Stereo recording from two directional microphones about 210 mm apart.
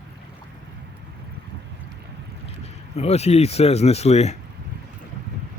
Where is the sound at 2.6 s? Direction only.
30° left (ahead or behind).